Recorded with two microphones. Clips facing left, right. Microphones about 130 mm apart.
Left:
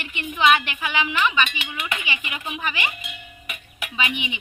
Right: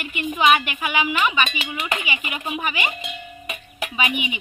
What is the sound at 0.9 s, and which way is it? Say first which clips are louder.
Speech: right 2 dB; 10° right (ahead or behind).